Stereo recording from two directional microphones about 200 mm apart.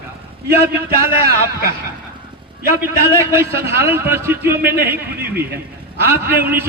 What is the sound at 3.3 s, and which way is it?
A man's voice, 15° right (ahead or behind).